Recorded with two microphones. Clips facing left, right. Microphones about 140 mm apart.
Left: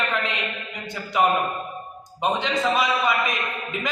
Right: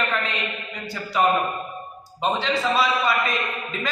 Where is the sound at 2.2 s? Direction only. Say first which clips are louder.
Even; 15° left (ahead or behind).